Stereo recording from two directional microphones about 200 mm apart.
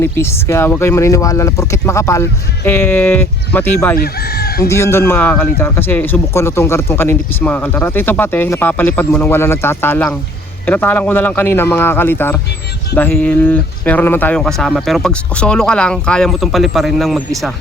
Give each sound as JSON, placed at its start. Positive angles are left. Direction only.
{"t": 0.0, "sound": "a man's voice", "side_deg": 10}
{"t": 3.9, "sound": "chicken", "side_deg": 50}
{"t": 4.6, "sound": "a man's voice", "side_deg": 15}